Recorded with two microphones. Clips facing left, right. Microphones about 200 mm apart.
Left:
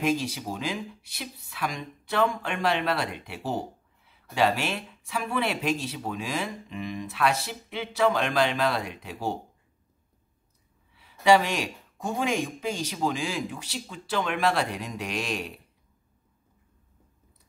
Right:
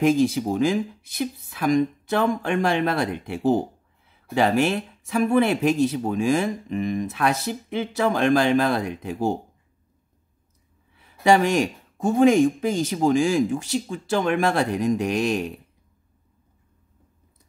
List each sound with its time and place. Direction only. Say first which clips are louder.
0.0 s speech: right 8 dB; 50° right (ahead or behind)
11.0 s speech: right 2 dB; 45° right (ahead or behind)